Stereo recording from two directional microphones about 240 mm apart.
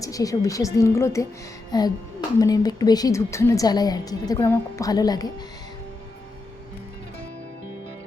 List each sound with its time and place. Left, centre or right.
0.0 s a woman's voice: centre